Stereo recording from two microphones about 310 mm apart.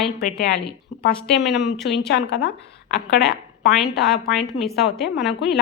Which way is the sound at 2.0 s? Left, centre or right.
Left.